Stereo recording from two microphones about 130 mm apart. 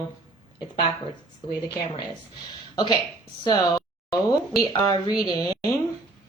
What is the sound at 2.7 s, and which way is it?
Speech, 35° left (ahead or behind).